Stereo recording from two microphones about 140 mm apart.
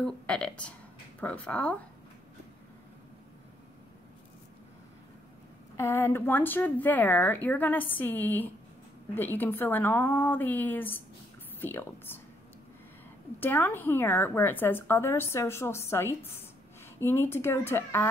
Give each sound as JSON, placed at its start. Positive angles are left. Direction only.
{"t": 0.0, "sound": "a woman's voice", "side_deg": 5}
{"t": 5.8, "sound": "a woman's voice", "side_deg": 20}
{"t": 13.4, "sound": "a woman's voice", "side_deg": 15}